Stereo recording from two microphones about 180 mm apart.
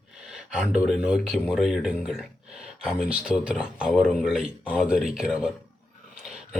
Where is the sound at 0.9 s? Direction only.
5° right (ahead or behind).